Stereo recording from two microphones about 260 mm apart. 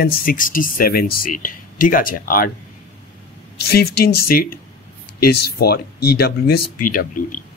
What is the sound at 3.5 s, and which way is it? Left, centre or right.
Speech, left.